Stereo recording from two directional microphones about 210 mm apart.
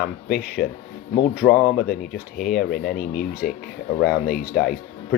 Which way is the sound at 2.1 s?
45° left (ahead or behind).